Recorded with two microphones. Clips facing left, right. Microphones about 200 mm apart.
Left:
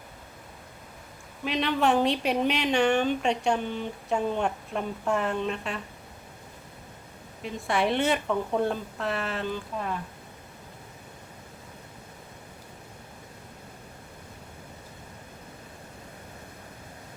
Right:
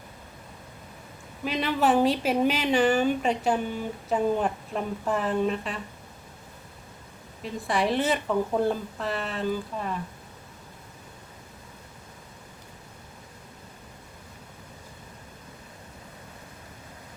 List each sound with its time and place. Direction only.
1.5 s a woman's voice: 5° right (ahead or behind)
7.4 s a woman's voice: centre (ahead or behind)